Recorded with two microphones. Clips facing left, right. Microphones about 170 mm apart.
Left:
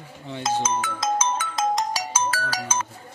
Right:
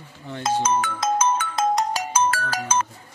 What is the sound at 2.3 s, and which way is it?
Music, 55° right (ahead or behind).